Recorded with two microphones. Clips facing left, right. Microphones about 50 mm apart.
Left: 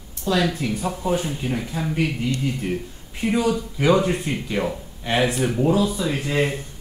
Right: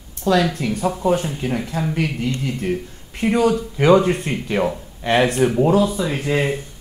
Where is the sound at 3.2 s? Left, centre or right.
Right.